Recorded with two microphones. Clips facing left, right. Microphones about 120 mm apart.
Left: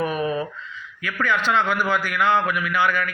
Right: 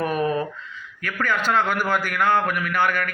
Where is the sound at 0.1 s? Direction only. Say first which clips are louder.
Right 1 dB; 45° right (ahead or behind).